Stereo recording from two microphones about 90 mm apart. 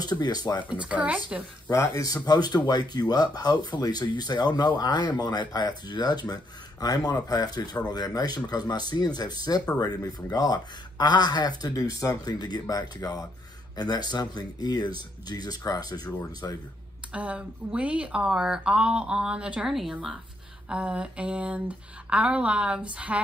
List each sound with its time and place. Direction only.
0.0 s speech: 50° left (ahead or behind)
0.7 s speech: 10° right (ahead or behind)
1.9 s speech: 45° left (ahead or behind)
17.1 s speech: 15° right (ahead or behind)